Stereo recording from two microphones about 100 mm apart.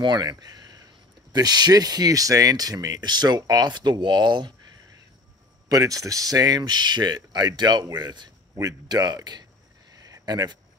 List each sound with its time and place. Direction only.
0.0 s speech: 45° right (ahead or behind)
5.7 s a man's voice: 35° right (ahead or behind)
10.0 s a sound: 40° right (ahead or behind)